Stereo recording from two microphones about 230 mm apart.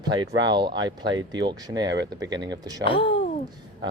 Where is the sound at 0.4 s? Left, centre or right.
Centre.